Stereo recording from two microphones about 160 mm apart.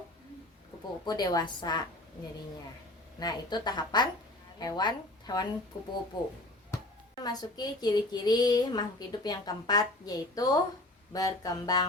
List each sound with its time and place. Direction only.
1.0 s a woman's voice: 25° left (ahead or behind)
3.2 s a woman's voice: 25° left (ahead or behind)
7.2 s a woman's voice: 25° left (ahead or behind)